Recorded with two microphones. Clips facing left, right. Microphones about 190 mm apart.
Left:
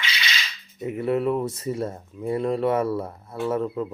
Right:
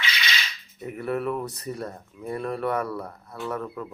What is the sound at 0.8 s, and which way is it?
Speech, 20° left (ahead or behind).